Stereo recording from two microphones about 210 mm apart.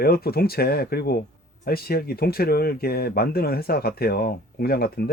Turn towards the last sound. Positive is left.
turn(degrees=45)  # may be behind; listen again after turning